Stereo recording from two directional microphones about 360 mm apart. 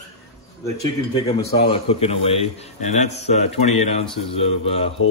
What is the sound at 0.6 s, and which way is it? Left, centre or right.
A man's voice, centre.